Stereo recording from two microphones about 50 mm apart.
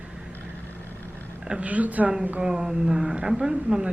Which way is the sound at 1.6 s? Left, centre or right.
Right.